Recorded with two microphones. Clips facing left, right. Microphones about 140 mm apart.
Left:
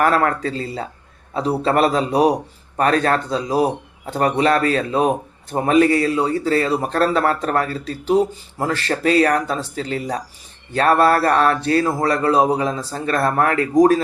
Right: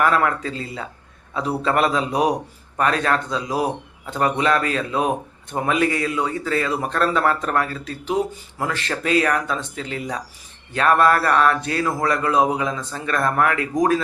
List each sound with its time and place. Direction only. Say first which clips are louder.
0.0 s a man's voice: left 2 dB; 40° left (ahead or behind)